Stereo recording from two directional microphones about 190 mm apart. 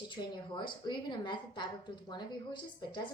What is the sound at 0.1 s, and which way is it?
A woman's voice, 25° left (ahead or behind).